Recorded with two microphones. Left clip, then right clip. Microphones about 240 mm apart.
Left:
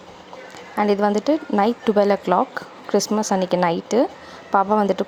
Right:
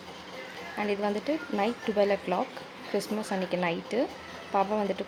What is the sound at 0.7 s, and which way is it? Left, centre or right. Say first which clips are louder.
Speech: left 11 dB; left.